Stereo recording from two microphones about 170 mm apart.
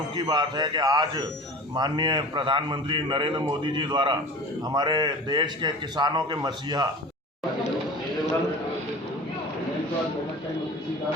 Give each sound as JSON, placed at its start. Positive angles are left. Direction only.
{"t": 0.2, "sound": "a man's voice", "side_deg": -25}